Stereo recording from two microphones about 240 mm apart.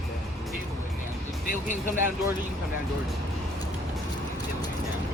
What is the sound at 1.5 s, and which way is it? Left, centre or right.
Speech, left.